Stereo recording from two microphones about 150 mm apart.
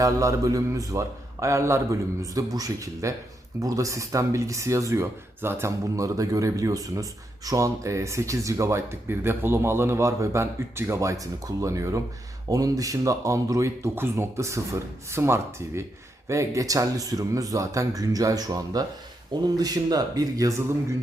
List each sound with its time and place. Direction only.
0.0 s speech: 20° right (ahead or behind)